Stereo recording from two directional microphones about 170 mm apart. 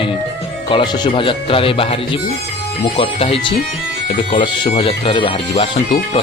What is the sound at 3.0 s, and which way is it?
Speech, 35° left (ahead or behind).